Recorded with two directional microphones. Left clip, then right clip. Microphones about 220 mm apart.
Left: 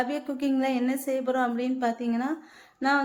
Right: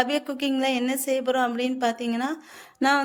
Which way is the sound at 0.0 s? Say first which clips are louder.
Right 4 dB; 45° right (ahead or behind).